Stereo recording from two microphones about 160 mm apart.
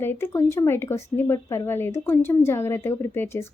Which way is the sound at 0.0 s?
15° left (ahead or behind).